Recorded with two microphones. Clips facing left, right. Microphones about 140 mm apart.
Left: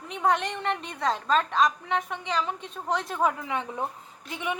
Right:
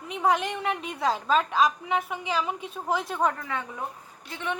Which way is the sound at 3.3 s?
15° left (ahead or behind).